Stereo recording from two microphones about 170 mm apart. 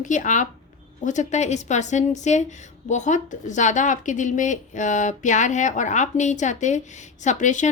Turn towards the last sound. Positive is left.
turn(degrees=45)  # may be behind; listen again after turning